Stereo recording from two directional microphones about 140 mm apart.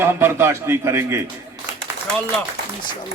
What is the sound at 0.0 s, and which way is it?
A man's voice, 15° right (ahead or behind).